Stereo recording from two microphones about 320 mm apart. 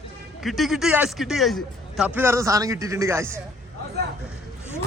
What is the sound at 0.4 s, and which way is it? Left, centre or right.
A man's voice, centre.